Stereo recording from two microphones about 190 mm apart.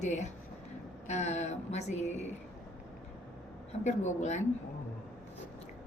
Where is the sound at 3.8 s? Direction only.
35° left (ahead or behind).